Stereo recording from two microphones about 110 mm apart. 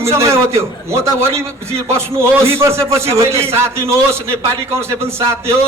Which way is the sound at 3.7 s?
65° right (ahead or behind).